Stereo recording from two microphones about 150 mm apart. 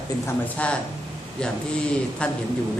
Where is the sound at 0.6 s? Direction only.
10° left (ahead or behind).